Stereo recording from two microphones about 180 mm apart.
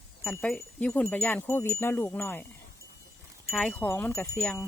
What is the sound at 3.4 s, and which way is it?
Speech, 5° left (ahead or behind).